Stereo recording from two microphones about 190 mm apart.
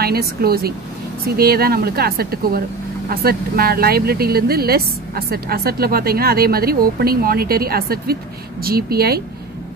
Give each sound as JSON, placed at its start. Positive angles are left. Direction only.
{"t": 0.0, "sound": "speech", "side_deg": -55}